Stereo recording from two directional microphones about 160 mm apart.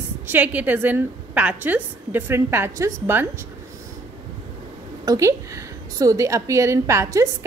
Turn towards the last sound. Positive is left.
turn(degrees=-20)  # may be behind; listen again after turning